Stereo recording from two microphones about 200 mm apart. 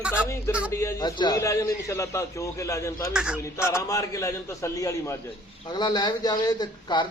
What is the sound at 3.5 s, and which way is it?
A man's voice, 15° left (ahead or behind).